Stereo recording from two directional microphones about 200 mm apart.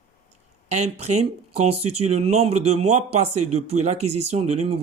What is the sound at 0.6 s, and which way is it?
Speech, 35° right (ahead or behind).